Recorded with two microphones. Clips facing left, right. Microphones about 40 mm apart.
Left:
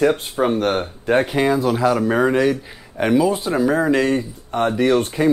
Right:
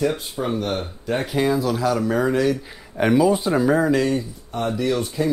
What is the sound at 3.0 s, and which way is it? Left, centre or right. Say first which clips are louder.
Speech: even; centre.